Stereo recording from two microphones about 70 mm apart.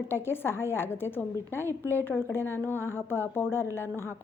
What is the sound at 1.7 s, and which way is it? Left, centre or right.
Speech, right.